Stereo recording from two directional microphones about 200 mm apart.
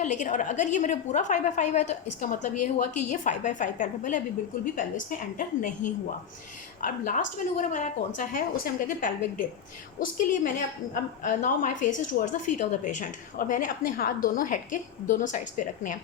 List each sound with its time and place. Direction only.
0.0 s a woman's voice: 35° left (ahead or behind)